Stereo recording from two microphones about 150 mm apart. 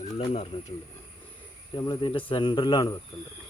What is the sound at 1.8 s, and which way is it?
Speech, 30° left (ahead or behind).